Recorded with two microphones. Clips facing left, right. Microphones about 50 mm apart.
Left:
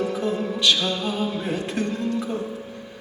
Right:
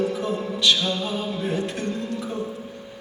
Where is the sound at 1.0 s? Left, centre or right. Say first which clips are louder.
Left 1 dB; left.